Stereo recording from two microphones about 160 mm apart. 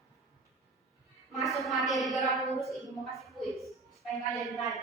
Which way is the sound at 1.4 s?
Centre (ahead or behind).